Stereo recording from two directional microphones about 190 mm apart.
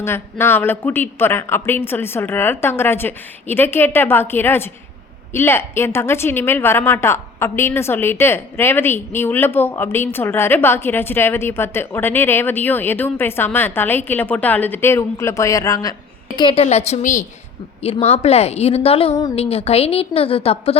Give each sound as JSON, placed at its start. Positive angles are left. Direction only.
{"t": 0.0, "sound": "a woman's voice", "side_deg": 10}